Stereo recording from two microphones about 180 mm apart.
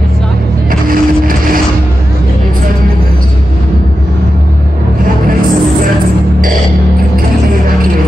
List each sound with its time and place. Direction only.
0.7 s printer: 50° right (ahead or behind)